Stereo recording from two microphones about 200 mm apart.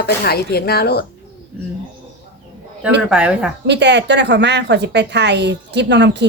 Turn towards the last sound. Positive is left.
turn(degrees=-60)  # may be behind; listen again after turning